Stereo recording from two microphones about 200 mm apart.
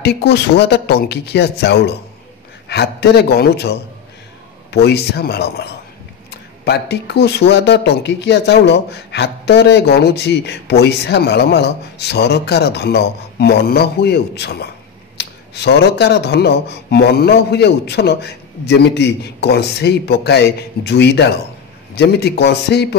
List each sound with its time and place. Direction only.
0.0 s speech: 55° left (ahead or behind)